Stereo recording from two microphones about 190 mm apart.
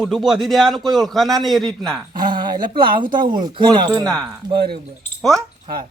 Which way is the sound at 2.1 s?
25° right (ahead or behind).